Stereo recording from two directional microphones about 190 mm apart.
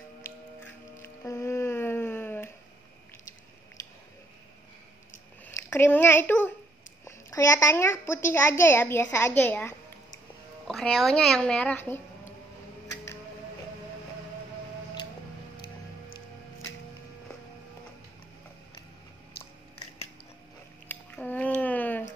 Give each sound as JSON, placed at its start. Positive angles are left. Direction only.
{"t": 1.0, "sound": "music", "side_deg": 15}
{"t": 5.4, "sound": "a woman's voice", "side_deg": 10}
{"t": 20.9, "sound": "a sound", "side_deg": 10}